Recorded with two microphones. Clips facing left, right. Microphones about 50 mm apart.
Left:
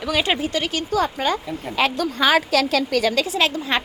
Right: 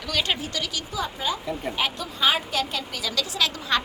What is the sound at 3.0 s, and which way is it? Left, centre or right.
Speech, left.